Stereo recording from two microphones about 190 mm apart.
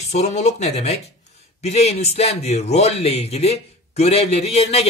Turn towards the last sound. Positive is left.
turn(degrees=35)  # may be behind; listen again after turning